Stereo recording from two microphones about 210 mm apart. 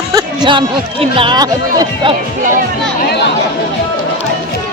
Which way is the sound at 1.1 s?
25° right (ahead or behind).